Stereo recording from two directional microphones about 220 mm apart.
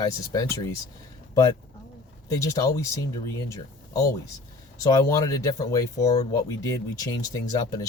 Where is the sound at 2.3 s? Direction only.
15° left (ahead or behind).